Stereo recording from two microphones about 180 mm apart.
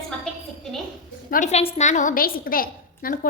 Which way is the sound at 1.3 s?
40° left (ahead or behind).